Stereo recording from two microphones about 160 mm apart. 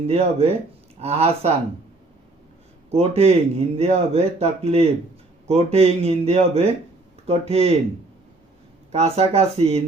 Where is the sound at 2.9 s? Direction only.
40° right (ahead or behind).